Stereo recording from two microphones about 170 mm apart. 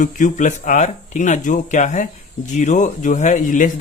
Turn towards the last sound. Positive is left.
turn(degrees=50)  # may be behind; listen again after turning